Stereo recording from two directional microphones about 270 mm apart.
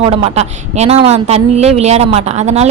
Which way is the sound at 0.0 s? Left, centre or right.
Right.